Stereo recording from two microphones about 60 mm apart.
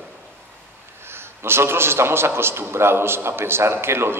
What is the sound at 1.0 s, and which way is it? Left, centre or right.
A man's voice, right.